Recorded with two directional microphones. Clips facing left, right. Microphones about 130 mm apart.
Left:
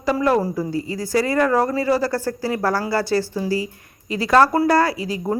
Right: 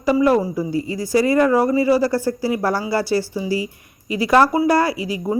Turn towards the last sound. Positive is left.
turn(degrees=-15)  # may be behind; listen again after turning